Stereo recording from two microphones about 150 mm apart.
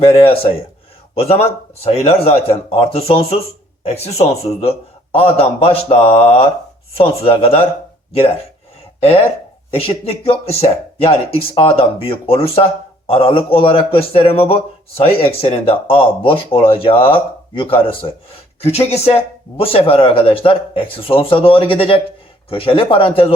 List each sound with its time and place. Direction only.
0.0 s speech: 35° left (ahead or behind)
9.7 s speech: 40° left (ahead or behind)